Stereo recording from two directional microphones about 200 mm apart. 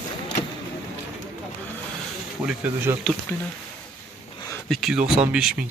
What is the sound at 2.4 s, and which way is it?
Speech, 10° right (ahead or behind).